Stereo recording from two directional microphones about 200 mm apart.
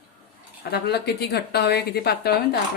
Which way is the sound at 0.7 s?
55° left (ahead or behind).